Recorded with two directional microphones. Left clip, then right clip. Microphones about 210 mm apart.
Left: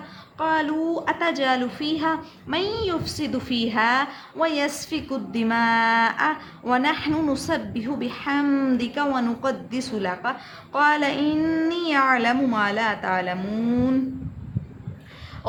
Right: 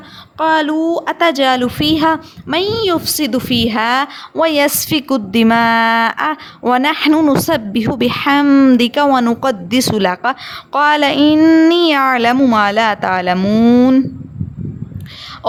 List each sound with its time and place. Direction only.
0.3 s a woman's voice: 40° right (ahead or behind)